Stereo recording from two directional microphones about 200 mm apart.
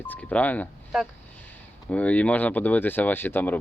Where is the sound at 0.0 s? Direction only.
10° left (ahead or behind).